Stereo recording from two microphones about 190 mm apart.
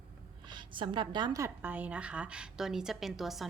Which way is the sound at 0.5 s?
25° right (ahead or behind).